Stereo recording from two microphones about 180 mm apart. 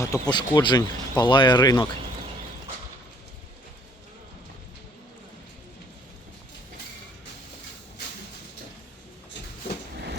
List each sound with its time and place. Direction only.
0.0 s speech: 20° left (ahead or behind)